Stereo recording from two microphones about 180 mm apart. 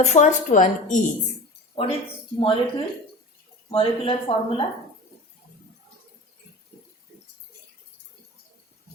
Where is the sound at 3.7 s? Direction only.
30° left (ahead or behind).